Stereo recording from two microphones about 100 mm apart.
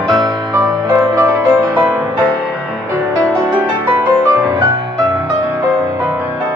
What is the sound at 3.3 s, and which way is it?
Music, 20° right (ahead or behind).